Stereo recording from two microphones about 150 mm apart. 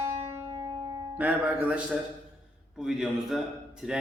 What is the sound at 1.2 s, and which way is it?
Music, 10° right (ahead or behind).